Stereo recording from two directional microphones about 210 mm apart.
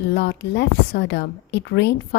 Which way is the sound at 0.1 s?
55° left (ahead or behind).